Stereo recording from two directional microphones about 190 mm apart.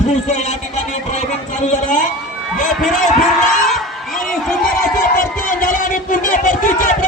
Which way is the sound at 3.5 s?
Centre (ahead or behind).